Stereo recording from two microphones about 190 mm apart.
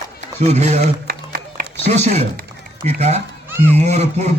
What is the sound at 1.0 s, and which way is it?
Music, 55° right (ahead or behind).